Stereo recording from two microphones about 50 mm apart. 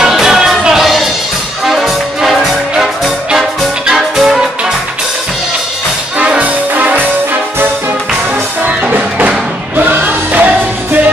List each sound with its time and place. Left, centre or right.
0.0 s music: centre
6.1 s music: right
8.6 s music: right